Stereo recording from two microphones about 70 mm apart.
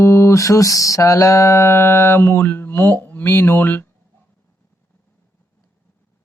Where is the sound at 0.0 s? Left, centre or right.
Left.